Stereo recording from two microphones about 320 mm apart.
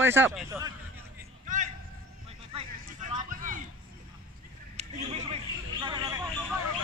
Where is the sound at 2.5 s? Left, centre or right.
Right.